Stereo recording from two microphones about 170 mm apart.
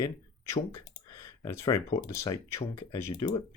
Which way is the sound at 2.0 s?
20° left (ahead or behind).